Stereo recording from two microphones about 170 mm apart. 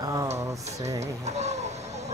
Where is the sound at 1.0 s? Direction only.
40° right (ahead or behind).